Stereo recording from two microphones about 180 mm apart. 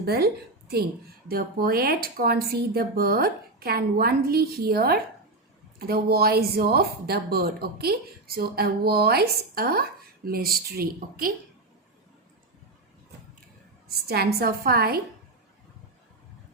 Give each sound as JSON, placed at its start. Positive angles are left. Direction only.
{"t": 0.0, "sound": "a woman's voice", "side_deg": -60}
{"t": 1.3, "sound": "a woman's voice", "side_deg": -55}
{"t": 13.8, "sound": "a woman's voice", "side_deg": -60}